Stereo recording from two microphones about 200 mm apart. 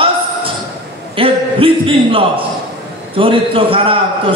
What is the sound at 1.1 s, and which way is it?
A man's voice, 25° right (ahead or behind).